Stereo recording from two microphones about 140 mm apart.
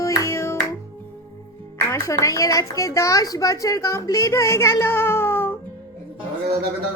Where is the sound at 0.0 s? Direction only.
20° left (ahead or behind).